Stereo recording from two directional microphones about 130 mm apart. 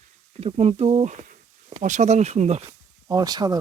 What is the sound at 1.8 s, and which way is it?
Speech, 70° right (ahead or behind).